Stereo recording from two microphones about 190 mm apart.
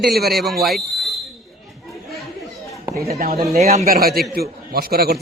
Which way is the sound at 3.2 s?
50° right (ahead or behind).